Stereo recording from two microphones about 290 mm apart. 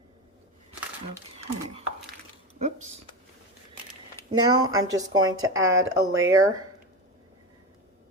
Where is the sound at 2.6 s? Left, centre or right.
Right.